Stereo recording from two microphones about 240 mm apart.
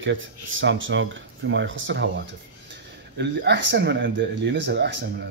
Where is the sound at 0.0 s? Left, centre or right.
Right.